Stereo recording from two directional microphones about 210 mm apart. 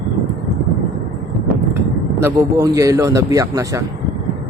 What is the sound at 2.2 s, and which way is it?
Speech, 15° right (ahead or behind).